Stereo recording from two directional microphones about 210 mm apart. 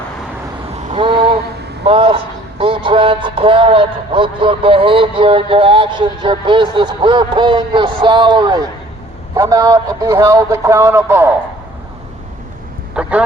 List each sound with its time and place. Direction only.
0.9 s a sound: 25° right (ahead or behind)
1.8 s a man's voice: 25° right (ahead or behind); by 11.3 s 10° right (ahead or behind)
13.0 s speech: 5° right (ahead or behind)